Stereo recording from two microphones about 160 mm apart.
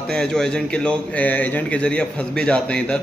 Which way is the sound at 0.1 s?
5° left (ahead or behind).